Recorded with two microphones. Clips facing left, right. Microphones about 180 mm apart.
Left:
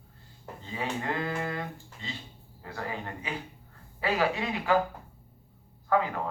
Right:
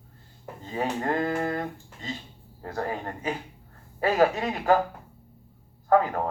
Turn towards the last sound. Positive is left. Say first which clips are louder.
# right 5 dB
turn(degrees=-45)  # may be behind; listen again after turning